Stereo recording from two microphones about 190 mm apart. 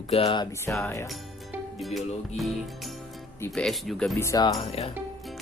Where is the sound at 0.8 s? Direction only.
10° left (ahead or behind).